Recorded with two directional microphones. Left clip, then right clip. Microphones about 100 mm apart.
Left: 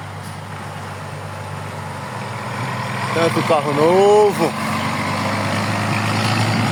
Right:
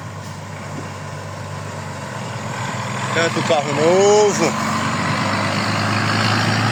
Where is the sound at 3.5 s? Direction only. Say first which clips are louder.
Even; 50° left (ahead or behind).